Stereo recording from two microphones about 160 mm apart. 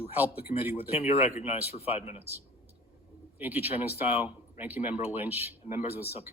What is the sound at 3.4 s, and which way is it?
Speech, 10° right (ahead or behind).